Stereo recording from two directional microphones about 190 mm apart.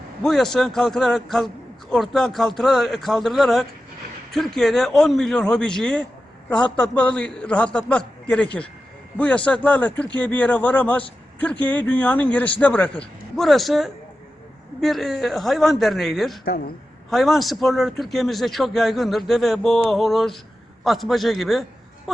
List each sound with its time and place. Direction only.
0.2 s a man's voice: centre (ahead or behind)